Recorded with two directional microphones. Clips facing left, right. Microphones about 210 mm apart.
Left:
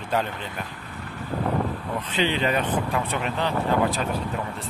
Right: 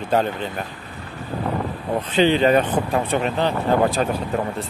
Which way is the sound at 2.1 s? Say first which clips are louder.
Right 8 dB; 35° right (ahead or behind).